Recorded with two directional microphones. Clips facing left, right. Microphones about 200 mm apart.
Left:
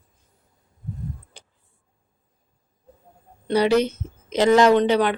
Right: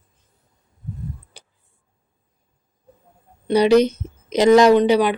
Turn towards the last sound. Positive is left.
turn(degrees=-10)  # may be behind; listen again after turning